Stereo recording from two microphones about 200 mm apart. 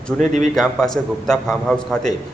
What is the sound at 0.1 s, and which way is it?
A man's voice, 10° left (ahead or behind).